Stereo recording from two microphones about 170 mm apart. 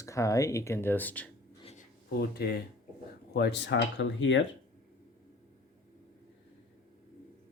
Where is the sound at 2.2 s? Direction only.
70° left (ahead or behind).